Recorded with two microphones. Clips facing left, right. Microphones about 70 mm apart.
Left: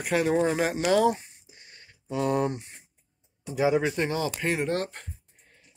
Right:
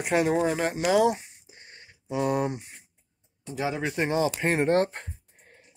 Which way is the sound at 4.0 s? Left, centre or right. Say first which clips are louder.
Right 3 dB; right.